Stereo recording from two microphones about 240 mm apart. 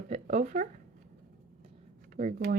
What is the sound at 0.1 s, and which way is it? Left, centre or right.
Speech, right.